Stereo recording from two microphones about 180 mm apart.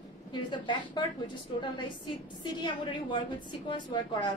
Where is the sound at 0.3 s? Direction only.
25° left (ahead or behind).